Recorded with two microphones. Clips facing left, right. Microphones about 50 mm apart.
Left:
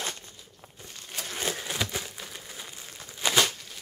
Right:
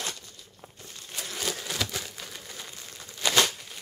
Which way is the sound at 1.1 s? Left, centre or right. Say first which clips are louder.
Left 1 dB; left.